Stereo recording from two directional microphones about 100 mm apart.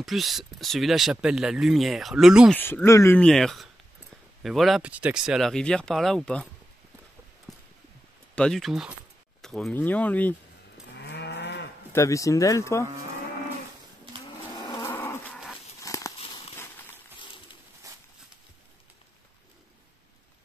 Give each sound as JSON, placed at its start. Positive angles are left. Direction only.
{"t": 0.0, "sound": "speech", "side_deg": 0}
{"t": 2.5, "sound": "speech", "side_deg": 20}
{"t": 3.2, "sound": "speech", "side_deg": 5}
{"t": 4.8, "sound": "speech", "side_deg": -15}
{"t": 5.5, "sound": "speech", "side_deg": 10}
{"t": 7.5, "sound": "a sound", "side_deg": 0}
{"t": 8.4, "sound": "speech", "side_deg": 5}
{"t": 9.8, "sound": "speech", "side_deg": 15}
{"t": 11.9, "sound": "speech", "side_deg": 30}
{"t": 14.6, "sound": "livestock", "side_deg": 30}
{"t": 15.8, "sound": "a sound", "side_deg": 35}
{"t": 16.5, "sound": "a sound", "side_deg": 25}
{"t": 17.2, "sound": "a sound", "side_deg": 55}